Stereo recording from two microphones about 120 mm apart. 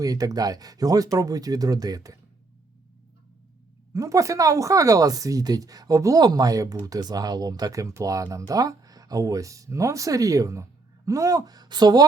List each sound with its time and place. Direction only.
0.0 s speech: 30° right (ahead or behind)
3.9 s speech: 25° right (ahead or behind)